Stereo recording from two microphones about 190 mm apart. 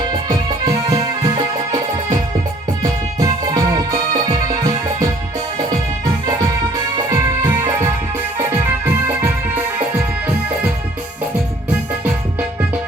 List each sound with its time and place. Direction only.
0.1 s music: 20° right (ahead or behind)
2.8 s music: 20° right (ahead or behind)
6.1 s music: 20° right (ahead or behind)
11.7 s music: 10° right (ahead or behind)